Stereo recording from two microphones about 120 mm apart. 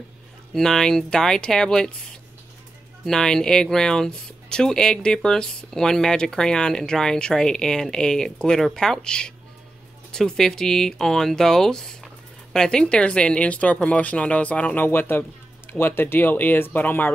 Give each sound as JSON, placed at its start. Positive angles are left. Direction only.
{"t": 0.6, "sound": "speech", "side_deg": 5}